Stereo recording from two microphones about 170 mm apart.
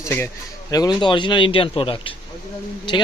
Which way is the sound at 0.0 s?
15° left (ahead or behind).